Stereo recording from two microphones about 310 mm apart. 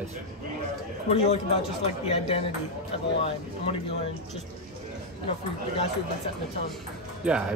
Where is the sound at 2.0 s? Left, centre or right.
Centre.